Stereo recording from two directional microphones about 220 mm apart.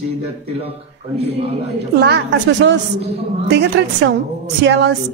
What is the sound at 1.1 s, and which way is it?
Speech, 30° right (ahead or behind).